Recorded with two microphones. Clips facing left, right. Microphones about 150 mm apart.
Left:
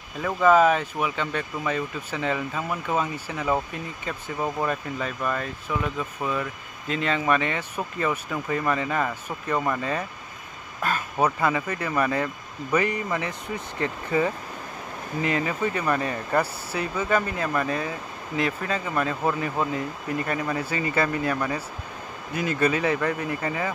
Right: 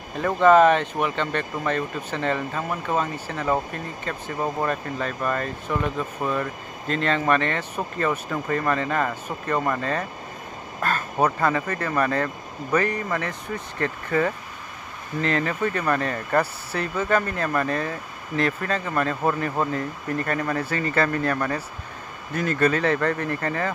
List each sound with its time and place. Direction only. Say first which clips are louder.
0.2 s speech: right 3 dB; 5° left (ahead or behind)